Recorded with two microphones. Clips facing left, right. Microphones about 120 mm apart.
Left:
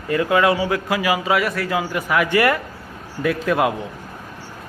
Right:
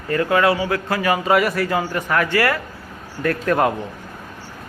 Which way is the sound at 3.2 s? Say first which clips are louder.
Right 1 dB; 5° left (ahead or behind).